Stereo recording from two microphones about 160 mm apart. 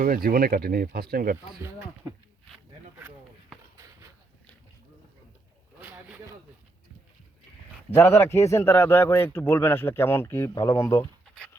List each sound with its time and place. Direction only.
0.0 s speech: 65° right (ahead or behind)
5.8 s a sound: 10° right (ahead or behind)
7.9 s a man's voice: 15° left (ahead or behind)